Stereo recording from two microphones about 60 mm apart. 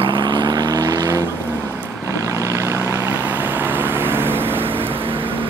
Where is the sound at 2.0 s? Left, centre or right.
Right.